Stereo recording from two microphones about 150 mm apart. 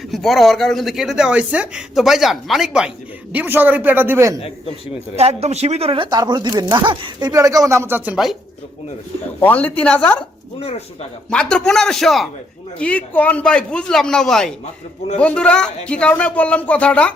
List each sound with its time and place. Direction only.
0.1 s speech: centre (ahead or behind)
3.3 s a man's voice: 15° right (ahead or behind)
4.4 s a man's voice: 40° left (ahead or behind)
5.1 s speech: 45° right (ahead or behind); by 8.4 s 5° right (ahead or behind)
9.4 s speech: 10° left (ahead or behind)
10.6 s speech: 45° left (ahead or behind)
11.3 s speech: 5° left (ahead or behind)